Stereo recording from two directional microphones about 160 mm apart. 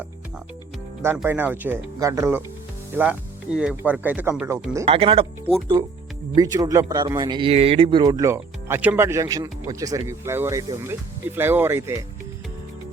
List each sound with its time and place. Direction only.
1.0 s speech: 15° right (ahead or behind)
4.9 s speech: 35° right (ahead or behind)
6.3 s speech: 20° right (ahead or behind)